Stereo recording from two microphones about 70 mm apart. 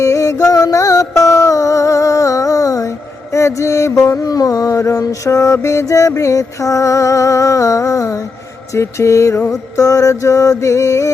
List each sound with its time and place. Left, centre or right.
0.0 s music: left
4.1 s music: left